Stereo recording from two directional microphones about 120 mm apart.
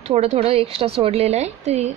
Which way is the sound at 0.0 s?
60° right (ahead or behind).